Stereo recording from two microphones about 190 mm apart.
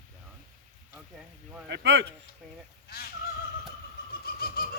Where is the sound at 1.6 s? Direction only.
65° right (ahead or behind).